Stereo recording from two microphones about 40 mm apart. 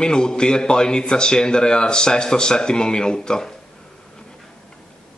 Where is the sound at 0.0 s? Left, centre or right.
Centre.